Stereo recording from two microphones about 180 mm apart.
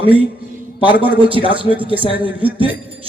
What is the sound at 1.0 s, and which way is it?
A man's voice, 30° right (ahead or behind).